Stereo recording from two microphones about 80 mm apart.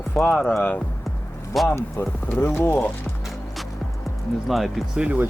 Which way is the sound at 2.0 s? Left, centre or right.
Left.